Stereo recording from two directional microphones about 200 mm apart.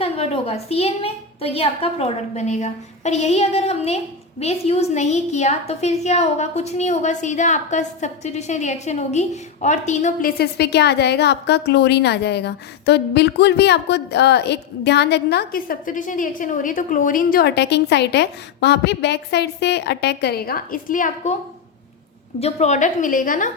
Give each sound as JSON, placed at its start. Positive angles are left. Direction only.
{"t": 0.0, "sound": "a woman's voice", "side_deg": 30}
{"t": 22.4, "sound": "a woman's voice", "side_deg": 30}